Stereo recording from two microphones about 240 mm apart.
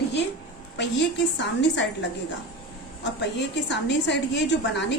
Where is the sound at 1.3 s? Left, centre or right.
Left.